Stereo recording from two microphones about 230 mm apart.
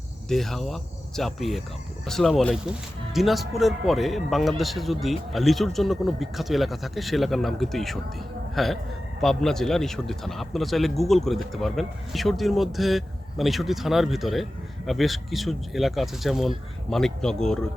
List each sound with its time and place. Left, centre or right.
0.3 s speech: centre